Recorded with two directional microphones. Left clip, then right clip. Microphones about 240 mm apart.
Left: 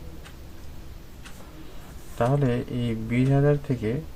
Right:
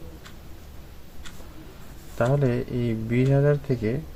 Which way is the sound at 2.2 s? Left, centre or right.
Centre.